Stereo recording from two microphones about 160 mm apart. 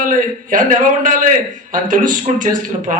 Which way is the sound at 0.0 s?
55° right (ahead or behind).